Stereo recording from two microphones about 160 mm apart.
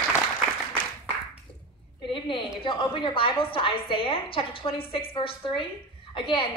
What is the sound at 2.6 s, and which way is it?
A woman's voice, 30° left (ahead or behind).